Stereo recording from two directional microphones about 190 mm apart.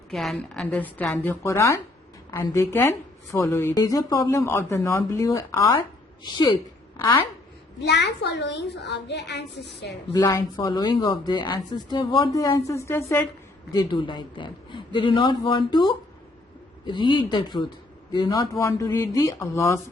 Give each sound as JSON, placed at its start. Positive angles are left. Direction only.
{"t": 0.1, "sound": "speech", "side_deg": 0}
{"t": 7.8, "sound": "a woman's voice", "side_deg": 65}
{"t": 10.2, "sound": "speech", "side_deg": 15}